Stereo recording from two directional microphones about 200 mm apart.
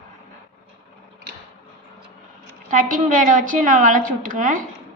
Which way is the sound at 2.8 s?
40° right (ahead or behind).